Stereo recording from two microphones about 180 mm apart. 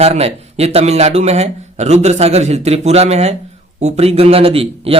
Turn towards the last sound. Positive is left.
turn(degrees=-30)  # may be behind; listen again after turning